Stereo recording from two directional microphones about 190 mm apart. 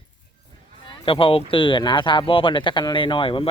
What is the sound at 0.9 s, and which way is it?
Speech, 30° left (ahead or behind).